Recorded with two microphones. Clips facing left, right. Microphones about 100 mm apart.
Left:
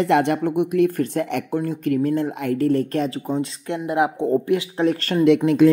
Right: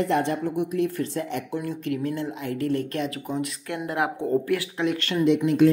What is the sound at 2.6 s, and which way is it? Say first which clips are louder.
Speech: left 6 dB; 40° left (ahead or behind).